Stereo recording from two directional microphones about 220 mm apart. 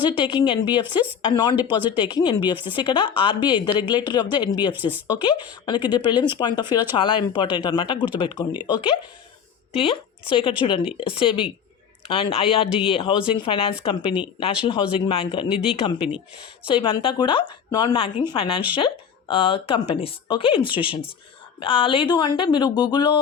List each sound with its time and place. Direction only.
0.2 s speech: 20° left (ahead or behind)
4.7 s speech: 10° right (ahead or behind)
5.0 s speech: 20° left (ahead or behind)